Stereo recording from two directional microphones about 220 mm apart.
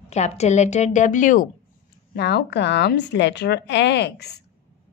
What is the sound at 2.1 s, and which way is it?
A woman's voice, 45° left (ahead or behind).